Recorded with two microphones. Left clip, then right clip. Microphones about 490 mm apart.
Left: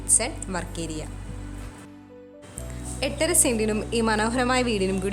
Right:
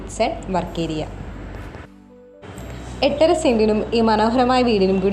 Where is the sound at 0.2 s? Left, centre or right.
Left.